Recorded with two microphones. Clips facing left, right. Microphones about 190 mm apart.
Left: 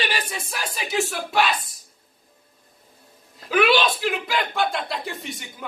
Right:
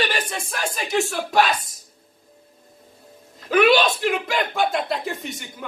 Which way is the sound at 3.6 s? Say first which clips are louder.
Right 3 dB; 45° right (ahead or behind).